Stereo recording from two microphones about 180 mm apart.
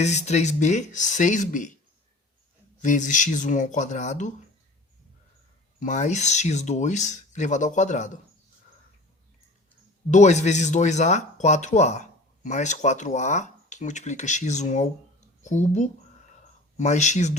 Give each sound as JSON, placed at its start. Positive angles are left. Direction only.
{"t": 0.0, "sound": "speech", "side_deg": 40}
{"t": 2.8, "sound": "speech", "side_deg": 45}
{"t": 5.8, "sound": "speech", "side_deg": 40}
{"t": 10.1, "sound": "speech", "side_deg": 40}
{"t": 15.4, "sound": "a sound", "side_deg": 40}